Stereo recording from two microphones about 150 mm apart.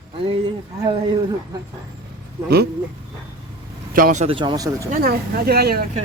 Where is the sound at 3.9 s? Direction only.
65° right (ahead or behind).